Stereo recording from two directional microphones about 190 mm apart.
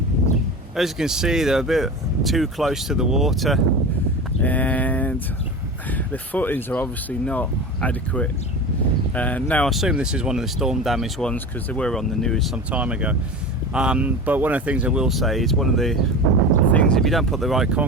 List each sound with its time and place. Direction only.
0.8 s speech: 5° right (ahead or behind)